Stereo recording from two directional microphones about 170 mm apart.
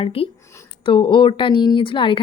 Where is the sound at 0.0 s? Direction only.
35° left (ahead or behind).